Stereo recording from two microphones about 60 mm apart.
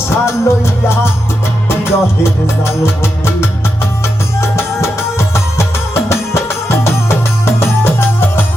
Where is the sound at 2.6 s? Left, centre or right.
Left.